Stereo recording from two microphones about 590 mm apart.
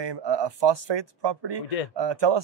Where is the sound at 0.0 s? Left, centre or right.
Right.